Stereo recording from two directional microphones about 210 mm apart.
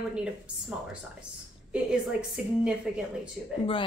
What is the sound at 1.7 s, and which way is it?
A woman's voice, 5° right (ahead or behind).